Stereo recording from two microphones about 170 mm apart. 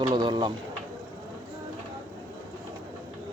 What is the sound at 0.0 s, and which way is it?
Speech, 25° right (ahead or behind).